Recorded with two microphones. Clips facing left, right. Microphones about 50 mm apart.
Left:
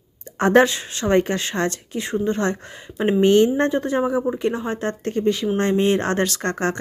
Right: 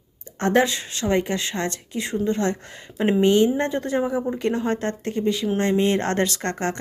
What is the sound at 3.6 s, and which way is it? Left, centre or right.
Speech, left.